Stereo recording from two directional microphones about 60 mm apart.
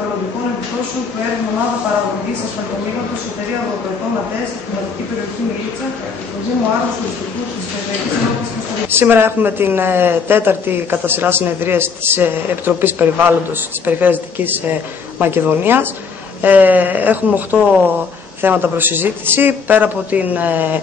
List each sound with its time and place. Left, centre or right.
8.9 s speech: right